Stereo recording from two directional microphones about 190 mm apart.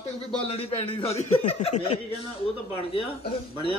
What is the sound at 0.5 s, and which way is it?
A man's voice, 30° left (ahead or behind).